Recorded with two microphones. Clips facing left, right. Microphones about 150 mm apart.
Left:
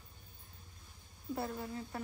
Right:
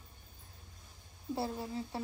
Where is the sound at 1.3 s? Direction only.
30° right (ahead or behind).